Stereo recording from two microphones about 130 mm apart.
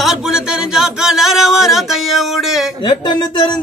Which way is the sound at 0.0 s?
5° right (ahead or behind).